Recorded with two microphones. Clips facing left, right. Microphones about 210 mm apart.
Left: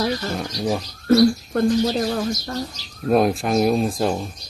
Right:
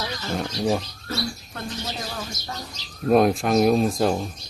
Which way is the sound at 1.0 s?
55° left (ahead or behind).